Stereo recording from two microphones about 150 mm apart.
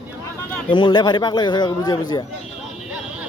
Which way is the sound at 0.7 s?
30° left (ahead or behind).